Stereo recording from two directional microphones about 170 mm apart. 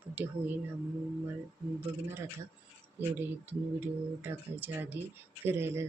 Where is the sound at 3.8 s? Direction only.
10° right (ahead or behind).